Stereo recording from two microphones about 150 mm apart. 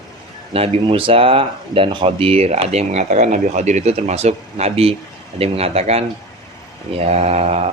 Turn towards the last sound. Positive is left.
turn(degrees=-45)  # may be behind; listen again after turning